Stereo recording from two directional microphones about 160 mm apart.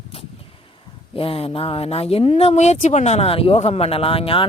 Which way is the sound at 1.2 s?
35° left (ahead or behind).